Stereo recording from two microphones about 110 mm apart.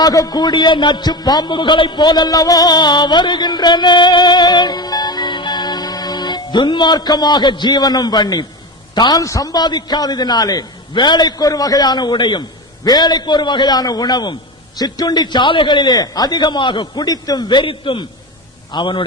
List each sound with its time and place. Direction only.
0.0 s a man's voice: 35° left (ahead or behind)